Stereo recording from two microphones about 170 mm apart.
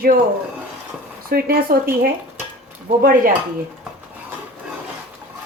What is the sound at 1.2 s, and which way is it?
Speech, 60° right (ahead or behind).